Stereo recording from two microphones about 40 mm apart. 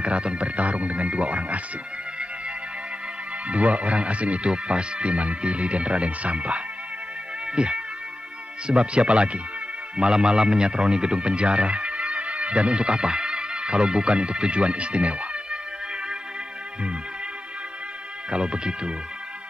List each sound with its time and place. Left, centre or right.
0.0 s speech: right
3.4 s speech: right
18.3 s speech: right